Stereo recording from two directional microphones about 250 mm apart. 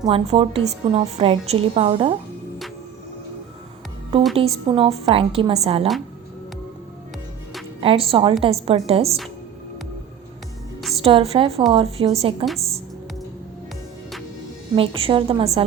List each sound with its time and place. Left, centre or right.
0.0 s a woman's voice: right
4.4 s a woman's voice: right
7.8 s a woman's voice: right
11.0 s a woman's voice: right
14.8 s a woman's voice: right